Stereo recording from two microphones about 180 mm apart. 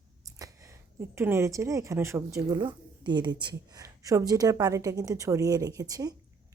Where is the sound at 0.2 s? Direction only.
20° right (ahead or behind).